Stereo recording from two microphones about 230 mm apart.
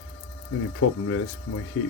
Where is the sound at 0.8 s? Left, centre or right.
Left.